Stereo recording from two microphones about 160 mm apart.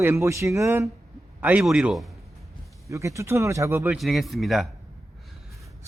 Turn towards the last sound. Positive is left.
turn(degrees=0)  # may be behind; listen again after turning